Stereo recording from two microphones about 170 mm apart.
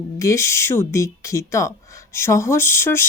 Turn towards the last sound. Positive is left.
turn(degrees=15)  # may be behind; listen again after turning